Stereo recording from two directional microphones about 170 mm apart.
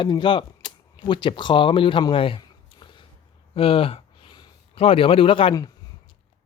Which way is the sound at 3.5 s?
35° left (ahead or behind).